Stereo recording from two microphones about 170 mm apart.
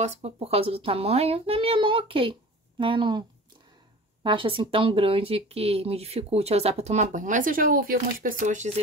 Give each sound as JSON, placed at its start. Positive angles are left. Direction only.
{"t": 0.0, "sound": "speech", "side_deg": -40}